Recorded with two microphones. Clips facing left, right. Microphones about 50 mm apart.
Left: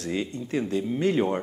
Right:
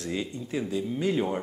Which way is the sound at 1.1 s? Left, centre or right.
Centre.